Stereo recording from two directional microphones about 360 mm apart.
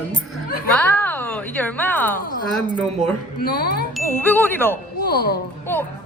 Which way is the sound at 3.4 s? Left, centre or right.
Left.